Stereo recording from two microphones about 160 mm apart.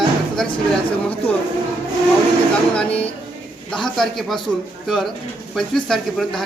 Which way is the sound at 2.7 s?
10° left (ahead or behind).